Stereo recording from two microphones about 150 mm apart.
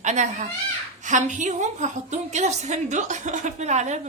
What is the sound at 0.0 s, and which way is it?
A child's voice, 55° right (ahead or behind).